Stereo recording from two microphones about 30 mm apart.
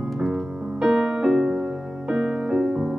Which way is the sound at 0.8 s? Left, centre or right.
Centre.